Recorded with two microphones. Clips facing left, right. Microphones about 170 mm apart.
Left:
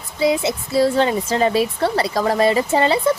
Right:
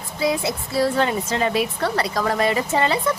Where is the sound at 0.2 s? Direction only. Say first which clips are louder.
Left 4 dB; 25° left (ahead or behind).